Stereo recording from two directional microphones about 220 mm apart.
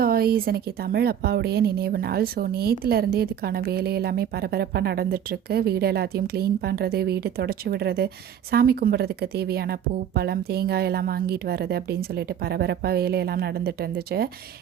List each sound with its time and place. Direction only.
0.0 s a woman's voice: 45° right (ahead or behind)